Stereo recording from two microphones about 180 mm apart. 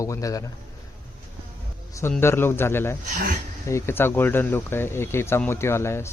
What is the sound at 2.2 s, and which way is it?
Speech, 15° left (ahead or behind).